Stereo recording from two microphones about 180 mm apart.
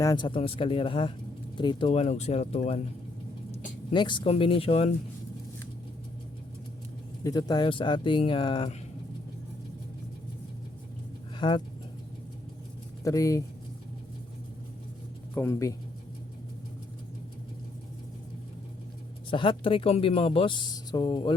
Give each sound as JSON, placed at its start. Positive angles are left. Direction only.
{"t": 0.0, "sound": "speech", "side_deg": 20}
{"t": 3.9, "sound": "speech", "side_deg": 25}
{"t": 7.3, "sound": "speech", "side_deg": 20}
{"t": 11.3, "sound": "speech", "side_deg": 25}
{"t": 13.1, "sound": "speech", "side_deg": 20}
{"t": 15.4, "sound": "speech", "side_deg": 15}
{"t": 19.3, "sound": "speech", "side_deg": 30}